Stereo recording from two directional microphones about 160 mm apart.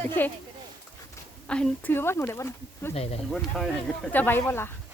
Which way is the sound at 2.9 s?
40° left (ahead or behind).